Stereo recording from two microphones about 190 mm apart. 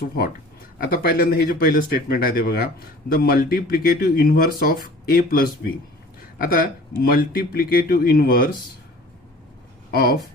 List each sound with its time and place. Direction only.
0.8 s speech: 55° left (ahead or behind)
7.0 s speech: 50° left (ahead or behind)
9.9 s speech: 55° left (ahead or behind)